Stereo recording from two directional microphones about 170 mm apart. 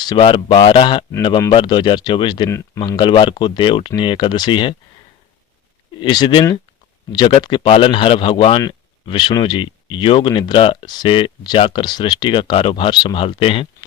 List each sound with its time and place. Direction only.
0.0 s speech: 30° left (ahead or behind)
6.0 s speech: 25° left (ahead or behind)